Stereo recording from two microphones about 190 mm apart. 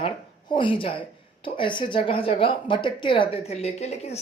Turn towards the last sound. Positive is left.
turn(degrees=35)  # may be behind; listen again after turning